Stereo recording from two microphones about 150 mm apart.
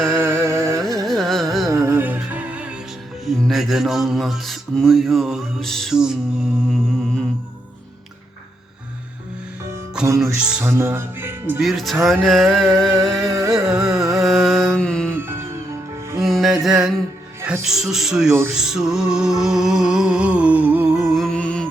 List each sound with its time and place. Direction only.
0.2 s music: 15° right (ahead or behind)
1.0 s carnatic music: centre (ahead or behind)
1.6 s music: 20° right (ahead or behind); by 7.3 s centre (ahead or behind)
10.2 s music: 5° right (ahead or behind)
10.7 s speech: 15° right (ahead or behind)
11.6 s music: centre (ahead or behind)
15.1 s music: 15° right (ahead or behind)
16.2 s music: centre (ahead or behind)
21.1 s music: 5° left (ahead or behind)